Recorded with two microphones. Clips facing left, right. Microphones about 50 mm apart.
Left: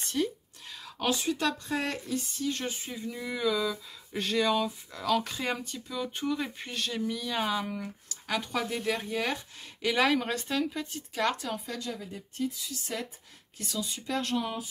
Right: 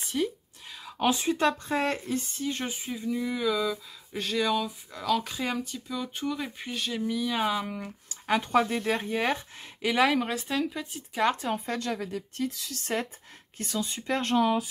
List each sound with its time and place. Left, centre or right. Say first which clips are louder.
0.0 s whispering: right 1 dB; centre
1.0 s speech: right 4 dB; right
2.4 s speech: right 1 dB; centre
7.8 s a sound: right 1 dB; right
8.4 s speech: right 7 dB; right
9.8 s speech: right 2 dB; centre
11.1 s speech: right 4 dB; centre
11.5 s speech: right 5 dB; right
13.6 s speech: right 3 dB; right
14.3 s speech: right 12 dB; right